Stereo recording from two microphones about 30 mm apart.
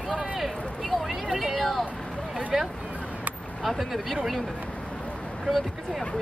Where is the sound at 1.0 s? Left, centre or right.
Centre.